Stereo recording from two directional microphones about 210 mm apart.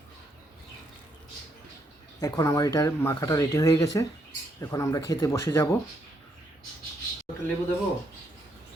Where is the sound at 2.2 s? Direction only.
15° left (ahead or behind).